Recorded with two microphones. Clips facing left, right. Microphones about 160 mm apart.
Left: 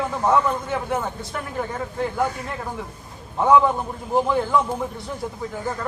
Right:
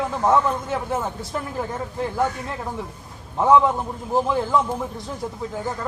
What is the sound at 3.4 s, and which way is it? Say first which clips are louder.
A man's voice: even; centre (ahead or behind).